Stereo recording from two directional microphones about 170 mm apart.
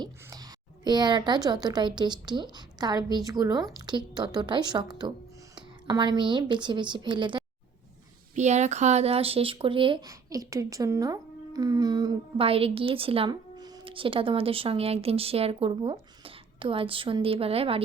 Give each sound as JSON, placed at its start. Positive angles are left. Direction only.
{"t": 0.0, "sound": "a sound", "side_deg": -20}
{"t": 1.6, "sound": "a woman's voice", "side_deg": -25}
{"t": 8.4, "sound": "speech", "side_deg": -45}